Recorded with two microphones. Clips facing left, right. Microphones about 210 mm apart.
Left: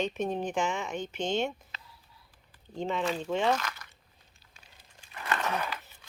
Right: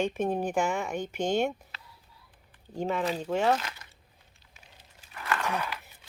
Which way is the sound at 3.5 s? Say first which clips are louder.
Right 1 dB; 25° right (ahead or behind).